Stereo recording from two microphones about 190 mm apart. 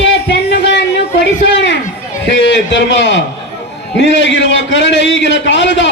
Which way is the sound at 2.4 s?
70° left (ahead or behind).